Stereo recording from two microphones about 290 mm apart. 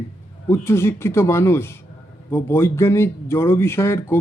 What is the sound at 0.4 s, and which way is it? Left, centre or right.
Speech, centre.